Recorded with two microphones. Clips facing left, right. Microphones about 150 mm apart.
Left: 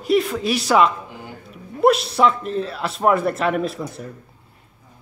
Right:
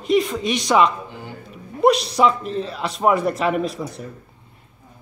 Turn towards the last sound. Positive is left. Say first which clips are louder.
# even
turn(degrees=0)  # may be behind; listen again after turning